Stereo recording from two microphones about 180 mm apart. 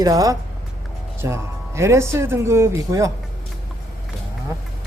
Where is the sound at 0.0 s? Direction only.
20° right (ahead or behind).